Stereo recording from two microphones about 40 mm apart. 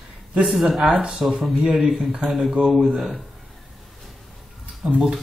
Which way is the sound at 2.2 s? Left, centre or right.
Centre.